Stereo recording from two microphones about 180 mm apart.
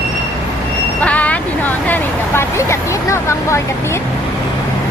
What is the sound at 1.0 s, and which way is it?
Speech, 10° left (ahead or behind).